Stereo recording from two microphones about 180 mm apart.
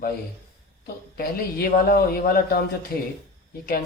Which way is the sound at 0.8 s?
55° left (ahead or behind).